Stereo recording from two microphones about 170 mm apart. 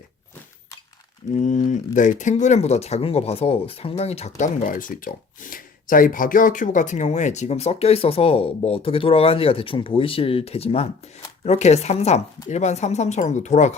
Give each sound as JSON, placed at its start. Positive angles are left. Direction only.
{"t": 1.3, "sound": "speech", "side_deg": 50}
{"t": 4.4, "sound": "speech", "side_deg": 50}